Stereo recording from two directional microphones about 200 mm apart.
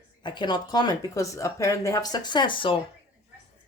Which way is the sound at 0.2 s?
20° left (ahead or behind).